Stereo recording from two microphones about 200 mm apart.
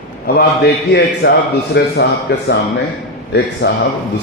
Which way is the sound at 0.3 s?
50° left (ahead or behind).